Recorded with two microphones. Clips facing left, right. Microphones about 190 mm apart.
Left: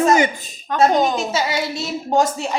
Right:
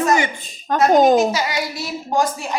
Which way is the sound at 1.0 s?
45° right (ahead or behind).